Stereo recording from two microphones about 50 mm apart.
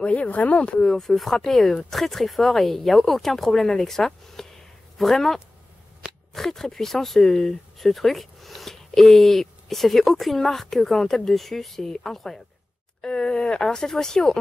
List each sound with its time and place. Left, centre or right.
0.0 s speech: left
0.9 s speech: centre